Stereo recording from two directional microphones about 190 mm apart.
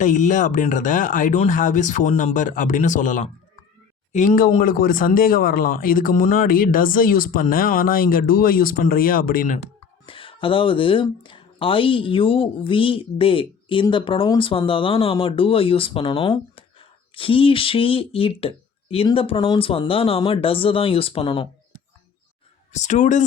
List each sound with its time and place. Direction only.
0.0 s speech: 40° left (ahead or behind)
10.1 s speech: 25° left (ahead or behind)
22.7 s speech: 40° left (ahead or behind)